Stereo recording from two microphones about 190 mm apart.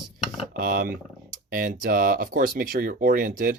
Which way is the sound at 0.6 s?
50° right (ahead or behind).